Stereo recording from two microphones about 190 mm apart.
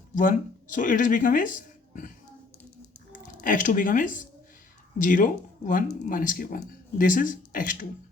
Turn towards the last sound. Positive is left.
turn(degrees=45)  # may be behind; listen again after turning